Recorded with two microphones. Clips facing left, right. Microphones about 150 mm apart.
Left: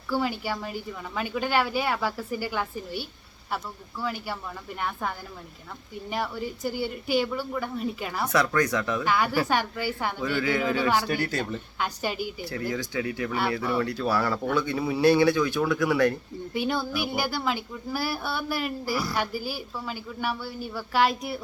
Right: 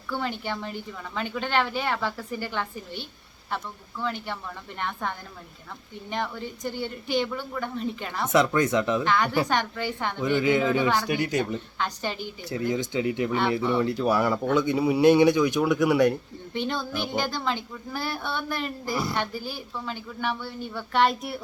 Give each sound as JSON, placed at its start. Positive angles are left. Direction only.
{"t": 0.1, "sound": "a woman's voice", "side_deg": 5}
{"t": 8.3, "sound": "speech", "side_deg": -25}
{"t": 9.0, "sound": "a woman's voice", "side_deg": 10}
{"t": 10.2, "sound": "speech", "side_deg": -20}
{"t": 10.8, "sound": "a woman's voice", "side_deg": 10}
{"t": 11.1, "sound": "speech", "side_deg": -15}
{"t": 11.8, "sound": "a woman's voice", "side_deg": 10}
{"t": 12.5, "sound": "speech", "side_deg": -20}
{"t": 16.5, "sound": "a woman's voice", "side_deg": 10}